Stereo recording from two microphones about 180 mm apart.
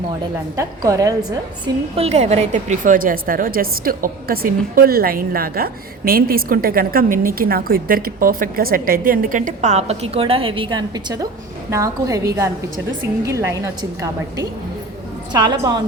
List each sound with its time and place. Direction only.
0.5 s a woman's voice: 20° right (ahead or behind)
2.0 s a woman's voice: 35° right (ahead or behind); by 13.6 s 15° right (ahead or behind)
15.3 s a woman's voice: 25° right (ahead or behind)